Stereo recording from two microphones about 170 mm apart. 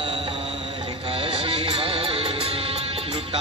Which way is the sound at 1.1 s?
30° right (ahead or behind).